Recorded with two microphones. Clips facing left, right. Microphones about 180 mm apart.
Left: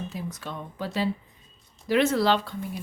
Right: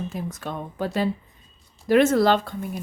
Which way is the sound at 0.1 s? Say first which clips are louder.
Right 4 dB; 50° right (ahead or behind).